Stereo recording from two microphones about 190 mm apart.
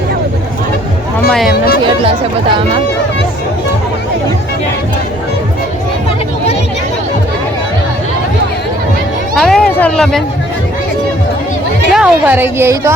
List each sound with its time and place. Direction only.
1.3 s speech: centre (ahead or behind)
2.0 s speech: 25° right (ahead or behind)
9.3 s a sound: centre (ahead or behind)
11.9 s a woman's voice: 5° right (ahead or behind)